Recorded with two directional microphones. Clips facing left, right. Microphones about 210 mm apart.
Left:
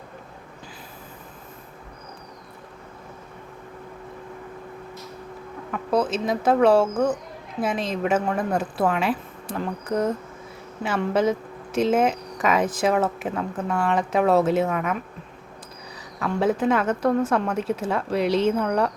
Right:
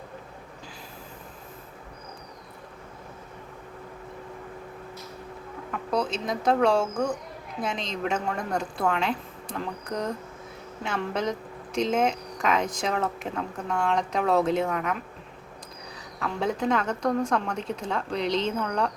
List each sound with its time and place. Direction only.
5.9 s speech: 5° left (ahead or behind)
16.2 s speech: 5° left (ahead or behind)